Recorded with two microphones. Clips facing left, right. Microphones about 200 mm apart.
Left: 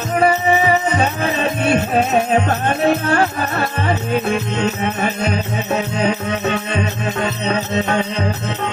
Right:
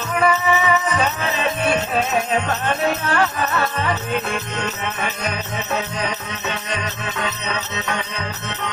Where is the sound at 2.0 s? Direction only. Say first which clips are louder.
Left 5 dB; 45° left (ahead or behind).